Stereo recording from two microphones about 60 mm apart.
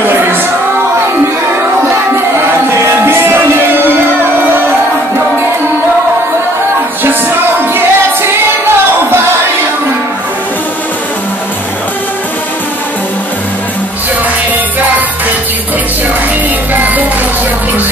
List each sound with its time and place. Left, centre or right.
0.0 s music: right
2.7 s music: right
7.7 s music: right
16.7 s music: right